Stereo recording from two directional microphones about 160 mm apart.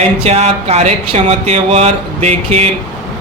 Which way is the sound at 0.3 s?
45° right (ahead or behind).